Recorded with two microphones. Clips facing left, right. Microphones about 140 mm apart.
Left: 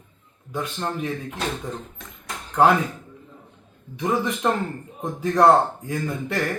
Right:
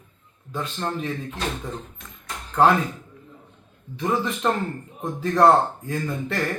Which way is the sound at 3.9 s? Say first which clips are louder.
Left 1 dB; 15° left (ahead or behind).